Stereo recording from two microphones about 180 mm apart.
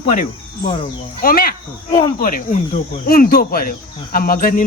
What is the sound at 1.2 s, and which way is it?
Speech, 55° left (ahead or behind).